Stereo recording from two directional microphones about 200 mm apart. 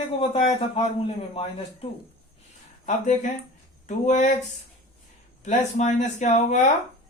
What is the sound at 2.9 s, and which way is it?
Speech, 40° left (ahead or behind).